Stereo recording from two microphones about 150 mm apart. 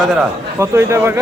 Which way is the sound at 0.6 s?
15° right (ahead or behind).